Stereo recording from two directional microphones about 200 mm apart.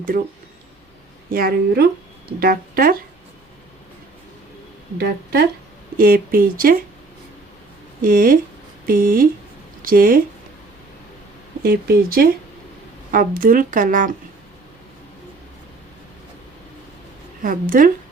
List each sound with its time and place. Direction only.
1.3 s speech: 45° right (ahead or behind)
4.9 s speech: 50° right (ahead or behind)
8.0 s speech: 45° right (ahead or behind)
11.6 s speech: 50° right (ahead or behind)
17.4 s speech: 45° right (ahead or behind)